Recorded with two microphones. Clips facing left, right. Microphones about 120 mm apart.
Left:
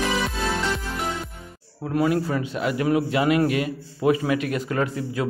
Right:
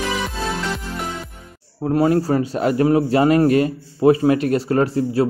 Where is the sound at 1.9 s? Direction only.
35° right (ahead or behind).